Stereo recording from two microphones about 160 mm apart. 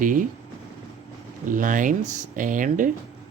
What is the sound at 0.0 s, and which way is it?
Speech, 55° right (ahead or behind).